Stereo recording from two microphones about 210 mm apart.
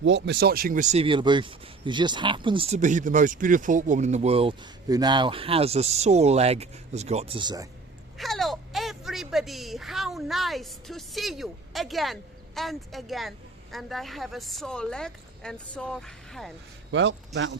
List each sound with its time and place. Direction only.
0.0 s speech: 55° right (ahead or behind); by 7.7 s 20° right (ahead or behind)
8.2 s speech: centre (ahead or behind)
16.9 s a man's voice: 60° right (ahead or behind)